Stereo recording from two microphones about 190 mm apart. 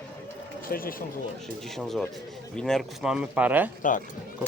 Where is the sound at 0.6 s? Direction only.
50° left (ahead or behind).